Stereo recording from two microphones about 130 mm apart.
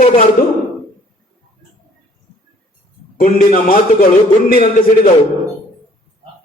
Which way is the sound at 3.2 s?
90° left.